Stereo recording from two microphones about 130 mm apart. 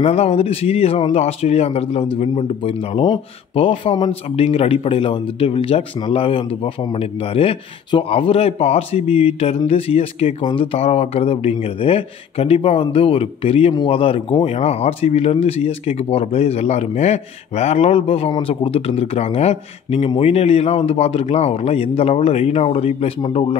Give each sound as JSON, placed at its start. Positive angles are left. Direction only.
{"t": 0.0, "sound": "speech", "side_deg": 50}
{"t": 4.1, "sound": "speech", "side_deg": 50}